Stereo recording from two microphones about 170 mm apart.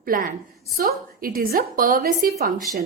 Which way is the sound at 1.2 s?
60° right (ahead or behind).